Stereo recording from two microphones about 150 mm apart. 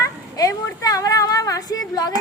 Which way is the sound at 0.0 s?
20° left (ahead or behind).